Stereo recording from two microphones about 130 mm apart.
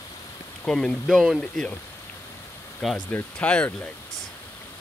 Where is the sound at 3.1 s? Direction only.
10° left (ahead or behind).